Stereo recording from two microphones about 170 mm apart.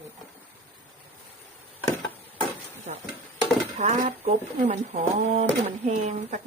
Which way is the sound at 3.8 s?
45° right (ahead or behind).